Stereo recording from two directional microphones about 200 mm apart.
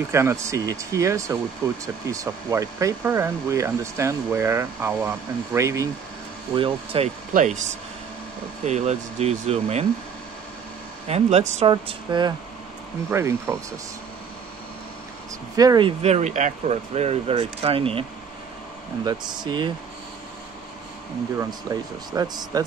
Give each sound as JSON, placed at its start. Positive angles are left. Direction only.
{"t": 0.1, "sound": "speech", "side_deg": -15}
{"t": 6.5, "sound": "speech", "side_deg": -25}
{"t": 7.3, "sound": "speech", "side_deg": -35}
{"t": 11.1, "sound": "speech", "side_deg": -30}
{"t": 11.7, "sound": "speech", "side_deg": -20}
{"t": 15.5, "sound": "speech", "side_deg": -20}
{"t": 16.0, "sound": "speech", "side_deg": -35}
{"t": 19.0, "sound": "speech", "side_deg": -20}
{"t": 21.4, "sound": "speech", "side_deg": -15}